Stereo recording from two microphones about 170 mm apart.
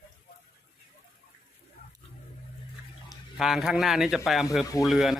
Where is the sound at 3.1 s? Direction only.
5° right (ahead or behind).